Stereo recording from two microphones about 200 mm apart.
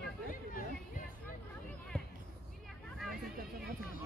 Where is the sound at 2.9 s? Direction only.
Centre (ahead or behind).